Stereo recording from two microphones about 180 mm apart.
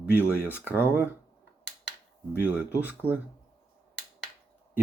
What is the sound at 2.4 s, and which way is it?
Speech, 10° right (ahead or behind).